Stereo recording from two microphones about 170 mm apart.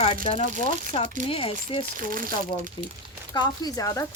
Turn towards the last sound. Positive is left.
turn(degrees=20)  # may be behind; listen again after turning